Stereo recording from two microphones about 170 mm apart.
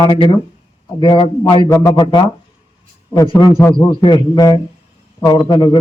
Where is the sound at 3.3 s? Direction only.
25° left (ahead or behind).